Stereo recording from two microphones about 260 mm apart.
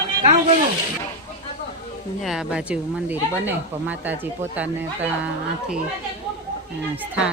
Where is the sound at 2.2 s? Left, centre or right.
Centre.